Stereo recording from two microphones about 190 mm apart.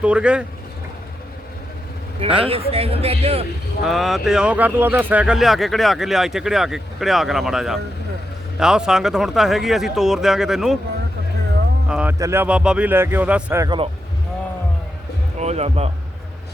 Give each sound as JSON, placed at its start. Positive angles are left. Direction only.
{"t": 0.0, "sound": "speech", "side_deg": -5}
{"t": 2.2, "sound": "speech", "side_deg": -30}
{"t": 3.8, "sound": "speech", "side_deg": 0}
{"t": 11.9, "sound": "speech", "side_deg": -5}
{"t": 13.7, "sound": "speech", "side_deg": -25}
{"t": 15.4, "sound": "speech", "side_deg": -35}